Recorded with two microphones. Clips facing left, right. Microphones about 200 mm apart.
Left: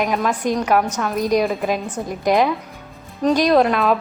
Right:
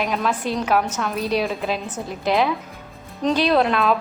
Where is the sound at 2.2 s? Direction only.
15° left (ahead or behind).